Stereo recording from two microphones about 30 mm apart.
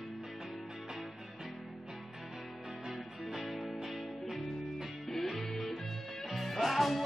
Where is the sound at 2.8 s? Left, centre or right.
Centre.